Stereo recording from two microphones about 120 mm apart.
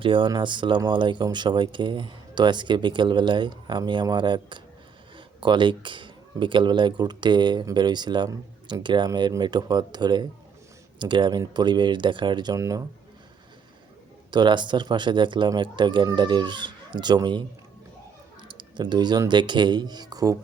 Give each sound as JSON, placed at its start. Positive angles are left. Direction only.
{"t": 0.0, "sound": "speech", "side_deg": -45}
{"t": 12.5, "sound": "speech", "side_deg": -25}
{"t": 14.3, "sound": "speech", "side_deg": -40}
{"t": 18.4, "sound": "a sound", "side_deg": -40}
{"t": 19.3, "sound": "speech", "side_deg": -40}